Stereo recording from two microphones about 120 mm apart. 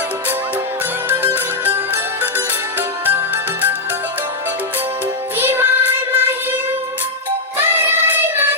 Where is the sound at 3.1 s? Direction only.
15° right (ahead or behind).